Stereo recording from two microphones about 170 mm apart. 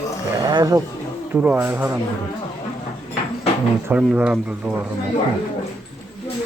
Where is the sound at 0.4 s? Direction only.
25° right (ahead or behind).